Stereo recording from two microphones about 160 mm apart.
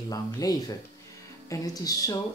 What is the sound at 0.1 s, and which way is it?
Speech, 25° left (ahead or behind).